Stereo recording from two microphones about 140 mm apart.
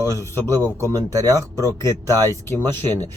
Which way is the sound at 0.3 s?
15° left (ahead or behind).